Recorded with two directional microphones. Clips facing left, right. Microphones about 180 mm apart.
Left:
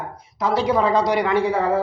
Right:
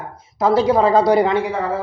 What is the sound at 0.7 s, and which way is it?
Speech, 35° right (ahead or behind).